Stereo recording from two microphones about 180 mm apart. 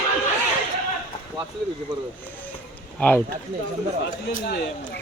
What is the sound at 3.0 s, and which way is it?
Speech, 10° left (ahead or behind).